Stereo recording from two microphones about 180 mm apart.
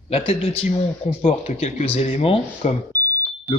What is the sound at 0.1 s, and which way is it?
Speech, 35° left (ahead or behind).